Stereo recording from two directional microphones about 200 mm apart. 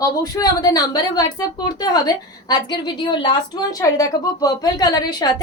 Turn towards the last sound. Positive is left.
turn(degrees=20)  # may be behind; listen again after turning